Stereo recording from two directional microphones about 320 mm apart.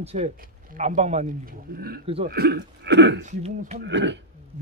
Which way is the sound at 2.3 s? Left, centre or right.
Right.